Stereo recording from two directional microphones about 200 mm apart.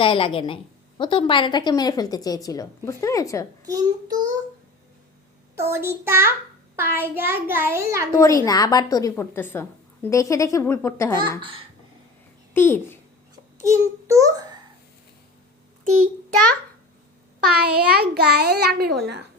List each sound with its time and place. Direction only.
0.0 s a woman's voice: 25° left (ahead or behind)
3.6 s a child's voice: 20° right (ahead or behind)
5.5 s a child's voice: 15° right (ahead or behind)
8.1 s a woman's voice: 15° left (ahead or behind)
11.3 s a child's voice: 25° right (ahead or behind)
12.5 s a child's voice: 10° left (ahead or behind)
13.6 s a child's voice: 15° right (ahead or behind)
17.5 s a child's voice: 50° right (ahead or behind)